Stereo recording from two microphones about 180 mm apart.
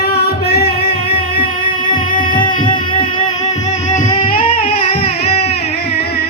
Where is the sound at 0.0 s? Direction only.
60° left (ahead or behind).